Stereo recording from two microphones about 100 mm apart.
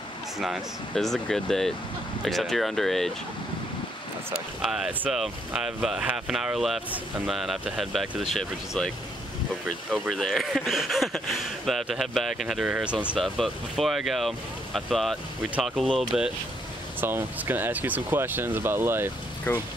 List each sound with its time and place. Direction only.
0.4 s speech: centre (ahead or behind)
4.6 s speech: 5° right (ahead or behind)
8.4 s speech: 5° left (ahead or behind); by 13.2 s 10° right (ahead or behind)
13.2 s speech: centre (ahead or behind)
17.0 s speech: 20° right (ahead or behind)
19.5 s speech: 20° left (ahead or behind)